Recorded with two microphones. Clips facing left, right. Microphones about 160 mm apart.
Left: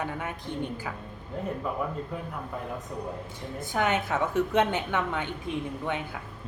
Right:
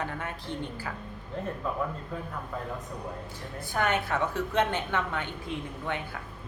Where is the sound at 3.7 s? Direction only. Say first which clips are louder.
Left 1 dB; 20° left (ahead or behind).